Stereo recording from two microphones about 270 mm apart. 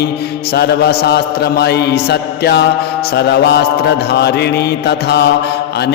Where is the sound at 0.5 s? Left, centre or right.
Left.